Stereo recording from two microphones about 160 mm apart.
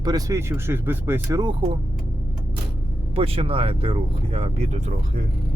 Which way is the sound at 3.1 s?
35° right (ahead or behind).